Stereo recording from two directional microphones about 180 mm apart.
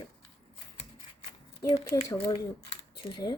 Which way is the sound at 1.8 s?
15° left (ahead or behind).